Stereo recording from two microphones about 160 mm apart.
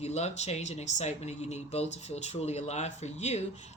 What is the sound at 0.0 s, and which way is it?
Speech, 45° left (ahead or behind).